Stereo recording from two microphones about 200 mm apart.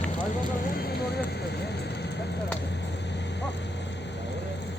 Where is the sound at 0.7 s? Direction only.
50° left (ahead or behind).